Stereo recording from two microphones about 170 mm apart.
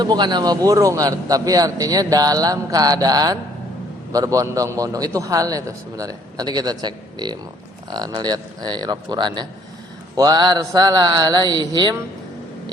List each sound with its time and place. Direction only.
0.0 s a man's voice: 25° right (ahead or behind)